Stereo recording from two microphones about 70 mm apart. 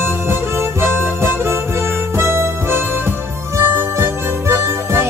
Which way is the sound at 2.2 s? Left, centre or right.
Right.